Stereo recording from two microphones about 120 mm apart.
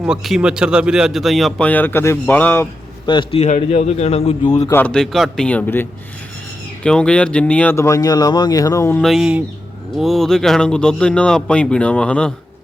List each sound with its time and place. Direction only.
0.0 s speech: 5° right (ahead or behind); by 2.6 s 15° left (ahead or behind)
3.1 s a man's voice: 40° left (ahead or behind)
3.4 s a man's voice: 75° left (ahead or behind); by 4.7 s 55° left (ahead or behind)
4.7 s speech: 10° left (ahead or behind)
7.8 s a man's voice: 25° left (ahead or behind)
9.0 s speech: centre (ahead or behind)